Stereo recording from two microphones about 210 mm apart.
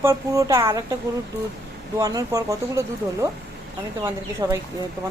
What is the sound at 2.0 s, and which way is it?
Speech, 15° right (ahead or behind).